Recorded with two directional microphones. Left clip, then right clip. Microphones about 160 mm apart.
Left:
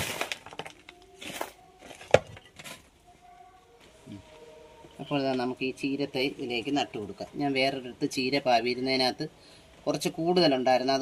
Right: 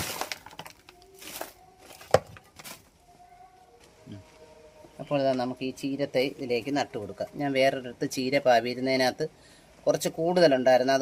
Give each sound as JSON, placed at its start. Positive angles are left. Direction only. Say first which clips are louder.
{"t": 5.0, "sound": "speech", "louder": "right 3 dB", "side_deg": -55}